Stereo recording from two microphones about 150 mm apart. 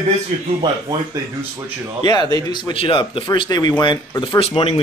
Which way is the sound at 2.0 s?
30° left (ahead or behind).